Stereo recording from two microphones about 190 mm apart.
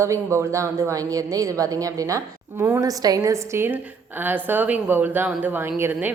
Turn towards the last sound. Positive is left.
turn(degrees=-10)  # may be behind; listen again after turning